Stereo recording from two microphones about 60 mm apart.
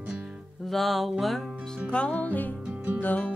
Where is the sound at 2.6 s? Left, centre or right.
Right.